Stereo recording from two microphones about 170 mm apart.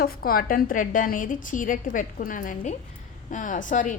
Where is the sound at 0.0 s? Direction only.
60° left (ahead or behind).